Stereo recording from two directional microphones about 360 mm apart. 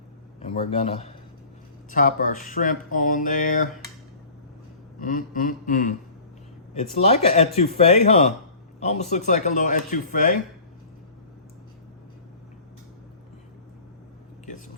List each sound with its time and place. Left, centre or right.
0.4 s speech: centre
4.9 s speech: left